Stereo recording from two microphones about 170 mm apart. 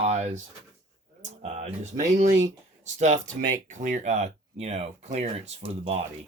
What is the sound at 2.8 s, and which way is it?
Speech, 45° right (ahead or behind).